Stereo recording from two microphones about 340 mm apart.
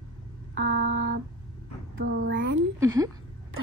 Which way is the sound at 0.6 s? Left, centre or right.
Right.